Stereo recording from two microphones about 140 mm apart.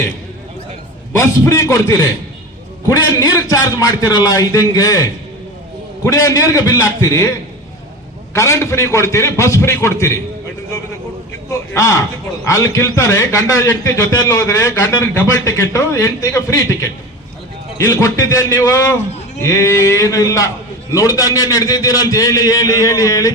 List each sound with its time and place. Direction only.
1.1 s a man's voice: 20° left (ahead or behind)
11.7 s a man's voice: 20° left (ahead or behind)